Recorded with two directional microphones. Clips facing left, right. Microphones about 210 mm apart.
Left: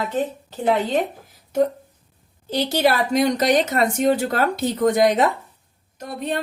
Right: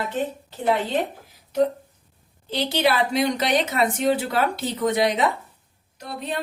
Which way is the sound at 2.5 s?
45° left (ahead or behind).